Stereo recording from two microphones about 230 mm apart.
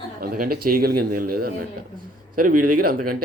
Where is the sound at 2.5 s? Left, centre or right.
Right.